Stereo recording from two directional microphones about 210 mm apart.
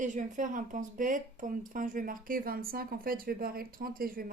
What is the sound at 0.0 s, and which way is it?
Speech, 35° right (ahead or behind).